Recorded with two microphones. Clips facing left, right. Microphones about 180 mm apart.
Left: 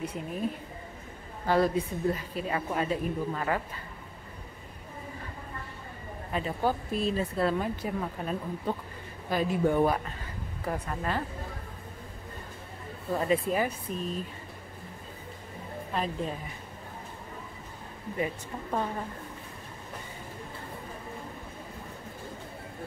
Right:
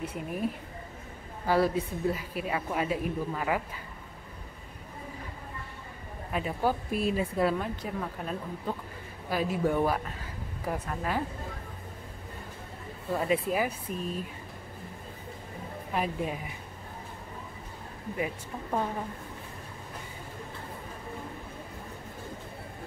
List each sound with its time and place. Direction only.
0.0 s speech: 5° right (ahead or behind)
1.5 s a woman's voice: 5° right (ahead or behind)
6.3 s a woman's voice: 5° right (ahead or behind)
7.5 s a woman's voice: 5° left (ahead or behind)
13.1 s speech: 5° right (ahead or behind)
15.9 s a woman's voice: 10° right (ahead or behind)
18.1 s speech: 5° right (ahead or behind)